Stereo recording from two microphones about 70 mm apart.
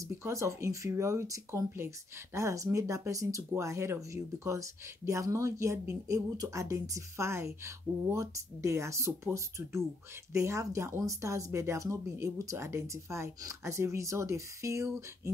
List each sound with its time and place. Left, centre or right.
0.0 s speech: right